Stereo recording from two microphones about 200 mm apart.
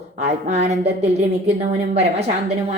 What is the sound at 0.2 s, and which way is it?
A woman's voice, 35° right (ahead or behind).